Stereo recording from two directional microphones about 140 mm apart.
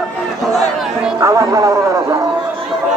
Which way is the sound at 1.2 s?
25° right (ahead or behind).